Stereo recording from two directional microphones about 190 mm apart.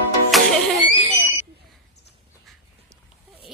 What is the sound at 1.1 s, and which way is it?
Smoke detector, 10° right (ahead or behind).